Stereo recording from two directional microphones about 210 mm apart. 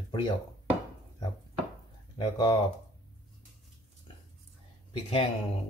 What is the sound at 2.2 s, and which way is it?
Speech, 20° left (ahead or behind).